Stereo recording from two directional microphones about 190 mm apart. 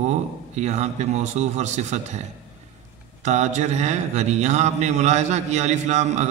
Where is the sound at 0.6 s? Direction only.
35° right (ahead or behind).